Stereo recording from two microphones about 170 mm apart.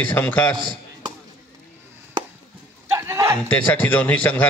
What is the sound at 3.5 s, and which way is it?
A man's voice, 10° left (ahead or behind).